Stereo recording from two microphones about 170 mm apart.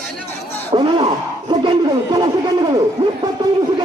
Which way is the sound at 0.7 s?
25° right (ahead or behind).